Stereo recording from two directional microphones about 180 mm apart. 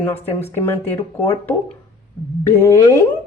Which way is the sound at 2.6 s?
15° left (ahead or behind).